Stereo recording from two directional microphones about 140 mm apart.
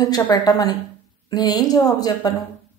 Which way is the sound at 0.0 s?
30° left (ahead or behind).